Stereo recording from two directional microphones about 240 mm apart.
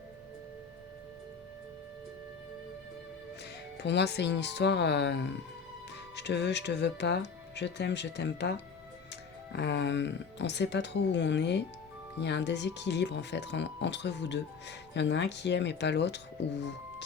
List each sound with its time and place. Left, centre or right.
3.8 s speech: left
9.6 s speech: left